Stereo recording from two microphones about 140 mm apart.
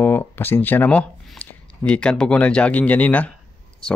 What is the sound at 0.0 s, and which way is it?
Speech, 15° left (ahead or behind).